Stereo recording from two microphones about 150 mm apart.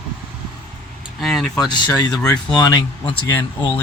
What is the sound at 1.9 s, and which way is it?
Speech, 20° left (ahead or behind).